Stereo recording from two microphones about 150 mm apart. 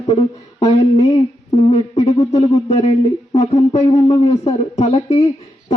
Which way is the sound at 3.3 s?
45° left (ahead or behind).